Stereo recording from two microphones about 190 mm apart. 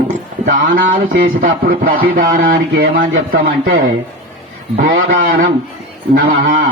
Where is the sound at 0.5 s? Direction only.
45° right (ahead or behind).